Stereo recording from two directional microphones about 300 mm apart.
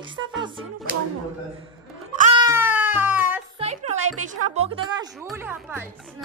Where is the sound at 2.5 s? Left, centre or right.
Centre.